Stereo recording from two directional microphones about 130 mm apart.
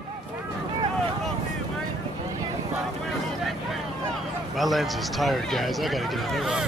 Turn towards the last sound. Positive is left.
turn(degrees=0)  # may be behind; listen again after turning